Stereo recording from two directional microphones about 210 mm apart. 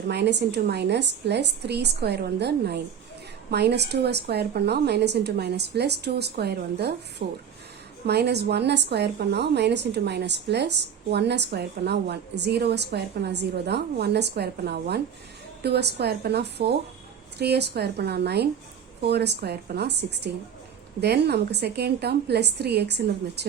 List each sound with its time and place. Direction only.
0.1 s a woman's voice: 55° right (ahead or behind)